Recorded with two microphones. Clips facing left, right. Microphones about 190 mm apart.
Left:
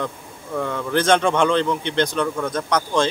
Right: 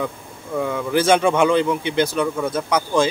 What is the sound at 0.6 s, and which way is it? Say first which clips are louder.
Speech: right 2 dB; 5° right (ahead or behind).